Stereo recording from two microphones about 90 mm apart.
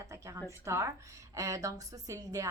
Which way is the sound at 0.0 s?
35° right (ahead or behind).